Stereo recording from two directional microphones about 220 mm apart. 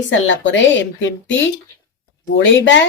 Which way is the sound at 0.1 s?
55° left (ahead or behind).